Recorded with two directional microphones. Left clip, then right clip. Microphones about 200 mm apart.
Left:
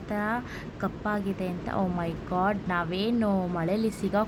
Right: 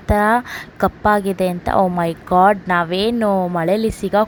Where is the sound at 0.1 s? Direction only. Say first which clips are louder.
Right 15 dB; 40° right (ahead or behind).